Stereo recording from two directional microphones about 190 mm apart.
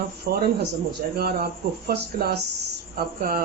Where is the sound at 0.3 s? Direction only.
50° right (ahead or behind).